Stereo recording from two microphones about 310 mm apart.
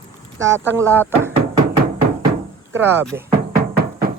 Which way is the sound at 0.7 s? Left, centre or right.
Centre.